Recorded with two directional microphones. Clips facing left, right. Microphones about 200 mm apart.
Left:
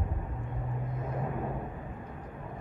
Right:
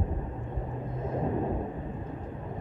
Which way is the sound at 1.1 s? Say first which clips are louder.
Right 6 dB; 25° right (ahead or behind).